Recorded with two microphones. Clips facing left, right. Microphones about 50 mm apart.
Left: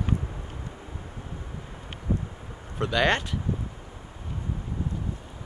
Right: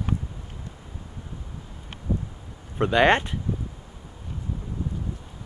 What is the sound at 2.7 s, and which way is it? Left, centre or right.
Speech, right.